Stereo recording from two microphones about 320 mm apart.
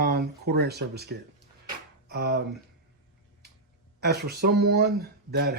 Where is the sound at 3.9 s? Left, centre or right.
Right.